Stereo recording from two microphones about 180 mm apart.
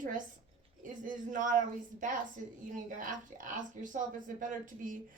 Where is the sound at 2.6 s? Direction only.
50° right (ahead or behind).